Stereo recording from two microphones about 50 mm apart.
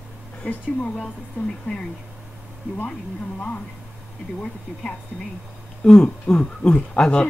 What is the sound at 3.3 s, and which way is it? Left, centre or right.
Speech, left.